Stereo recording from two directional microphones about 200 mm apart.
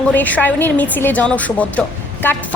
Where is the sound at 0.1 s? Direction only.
10° left (ahead or behind).